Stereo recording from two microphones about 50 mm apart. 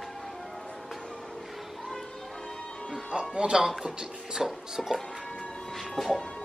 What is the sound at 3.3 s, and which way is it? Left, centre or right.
Speech, centre.